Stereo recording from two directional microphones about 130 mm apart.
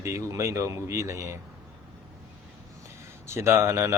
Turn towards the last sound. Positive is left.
turn(degrees=-20)  # may be behind; listen again after turning